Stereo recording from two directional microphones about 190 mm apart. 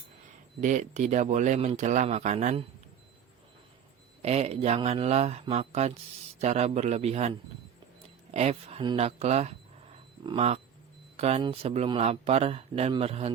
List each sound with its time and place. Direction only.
0.6 s speech: 40° right (ahead or behind)
4.2 s speech: 35° right (ahead or behind)